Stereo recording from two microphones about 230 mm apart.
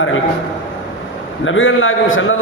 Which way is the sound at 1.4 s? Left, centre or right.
Left.